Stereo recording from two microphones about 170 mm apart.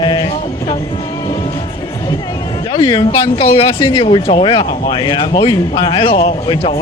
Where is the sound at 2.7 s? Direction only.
30° left (ahead or behind).